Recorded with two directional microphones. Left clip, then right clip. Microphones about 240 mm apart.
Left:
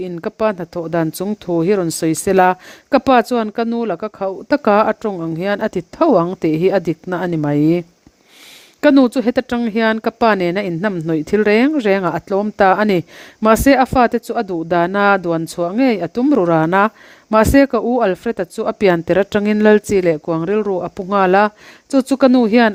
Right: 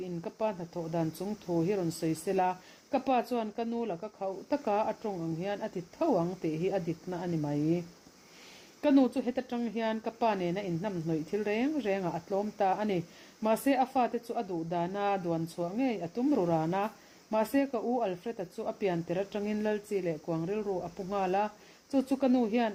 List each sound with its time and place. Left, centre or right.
0.0 s speech: left